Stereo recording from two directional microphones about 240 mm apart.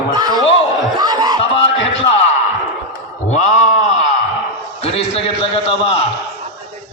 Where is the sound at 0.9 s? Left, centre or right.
Centre.